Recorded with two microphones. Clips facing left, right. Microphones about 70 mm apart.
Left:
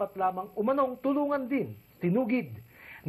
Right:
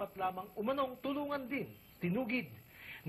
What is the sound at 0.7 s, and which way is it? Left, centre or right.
Speech, left.